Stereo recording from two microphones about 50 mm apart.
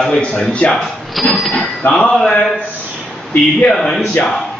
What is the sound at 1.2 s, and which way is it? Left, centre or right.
Train, centre.